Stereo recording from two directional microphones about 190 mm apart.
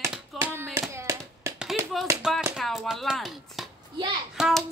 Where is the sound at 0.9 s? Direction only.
15° right (ahead or behind).